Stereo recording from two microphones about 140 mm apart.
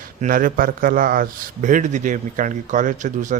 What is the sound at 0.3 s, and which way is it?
Speech, 80° right.